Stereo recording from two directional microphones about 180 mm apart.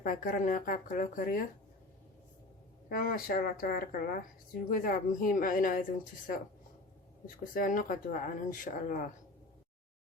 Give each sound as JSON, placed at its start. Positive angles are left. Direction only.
{"t": 0.0, "sound": "speech", "side_deg": 50}
{"t": 2.9, "sound": "speech", "side_deg": 55}
{"t": 7.5, "sound": "speech", "side_deg": 50}